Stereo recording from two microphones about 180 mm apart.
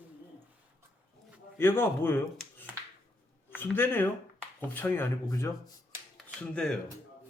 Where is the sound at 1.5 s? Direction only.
15° left (ahead or behind).